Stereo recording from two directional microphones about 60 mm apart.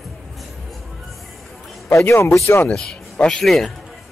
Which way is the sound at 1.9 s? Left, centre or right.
Left.